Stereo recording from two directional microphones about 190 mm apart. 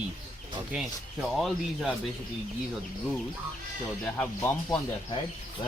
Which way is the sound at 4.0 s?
5° left (ahead or behind).